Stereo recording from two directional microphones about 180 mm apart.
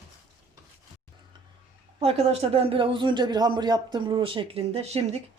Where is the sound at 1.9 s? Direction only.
30° right (ahead or behind).